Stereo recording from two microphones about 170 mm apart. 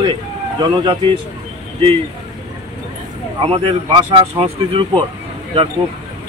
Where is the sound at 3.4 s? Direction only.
30° right (ahead or behind).